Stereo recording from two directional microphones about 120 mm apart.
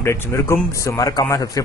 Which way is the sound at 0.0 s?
25° left (ahead or behind).